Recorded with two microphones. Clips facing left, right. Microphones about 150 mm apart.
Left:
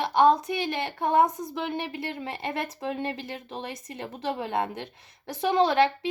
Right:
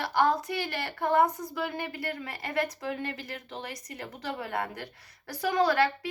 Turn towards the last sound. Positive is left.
turn(degrees=25)  # may be behind; listen again after turning